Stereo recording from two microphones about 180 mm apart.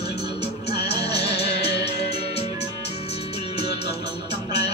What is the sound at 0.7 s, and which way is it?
Music, 65° left (ahead or behind).